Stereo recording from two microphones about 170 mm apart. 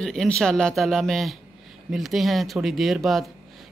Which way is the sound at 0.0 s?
5° left (ahead or behind).